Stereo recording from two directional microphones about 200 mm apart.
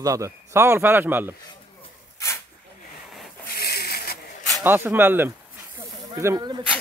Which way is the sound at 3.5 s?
50° left (ahead or behind).